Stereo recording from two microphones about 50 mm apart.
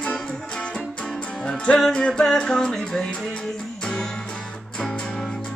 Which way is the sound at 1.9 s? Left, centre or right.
Centre.